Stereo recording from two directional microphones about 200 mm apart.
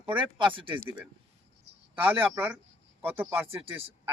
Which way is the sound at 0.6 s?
25° right (ahead or behind).